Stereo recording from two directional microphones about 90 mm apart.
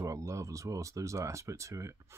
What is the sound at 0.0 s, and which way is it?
Speech, 35° right (ahead or behind).